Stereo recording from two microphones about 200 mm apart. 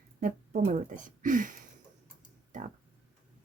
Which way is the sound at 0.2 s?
40° right (ahead or behind).